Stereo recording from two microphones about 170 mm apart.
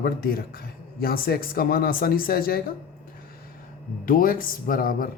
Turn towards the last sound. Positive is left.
turn(degrees=55)  # may be behind; listen again after turning